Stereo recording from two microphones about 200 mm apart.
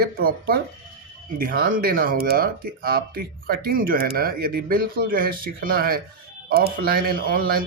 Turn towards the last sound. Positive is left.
turn(degrees=-45)  # may be behind; listen again after turning